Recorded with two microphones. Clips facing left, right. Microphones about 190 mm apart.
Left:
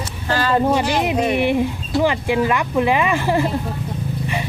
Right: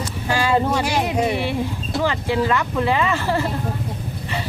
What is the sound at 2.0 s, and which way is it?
Speech, 15° left (ahead or behind).